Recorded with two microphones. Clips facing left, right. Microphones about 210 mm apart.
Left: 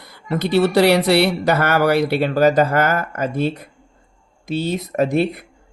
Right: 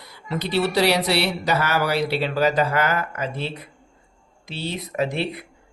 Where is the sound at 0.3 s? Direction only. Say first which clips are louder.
Left 6 dB; 55° left (ahead or behind).